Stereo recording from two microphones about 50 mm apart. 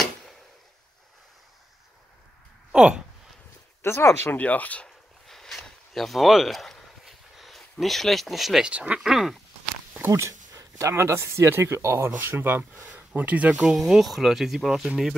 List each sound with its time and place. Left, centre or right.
2.7 s a sound: centre
3.8 s speech: left
4.4 s speech: left
5.2 s a sound: centre
7.8 s speech: centre
8.6 s speech: right
9.0 s speech: centre
10.0 s speech: right
11.5 s speech: right
13.1 s speech: right
13.7 s speech: centre